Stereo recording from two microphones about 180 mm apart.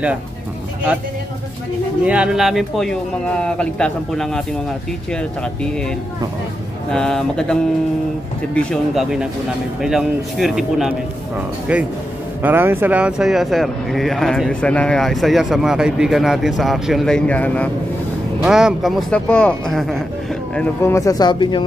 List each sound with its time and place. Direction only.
2.0 s speech: 5° right (ahead or behind)
6.9 s speech: 5° left (ahead or behind)
8.5 s speech: centre (ahead or behind)
18.4 s speech: 5° right (ahead or behind); by 21.6 s 25° left (ahead or behind)